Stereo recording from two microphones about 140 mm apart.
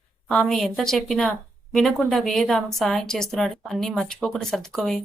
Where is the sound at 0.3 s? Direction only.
Centre (ahead or behind).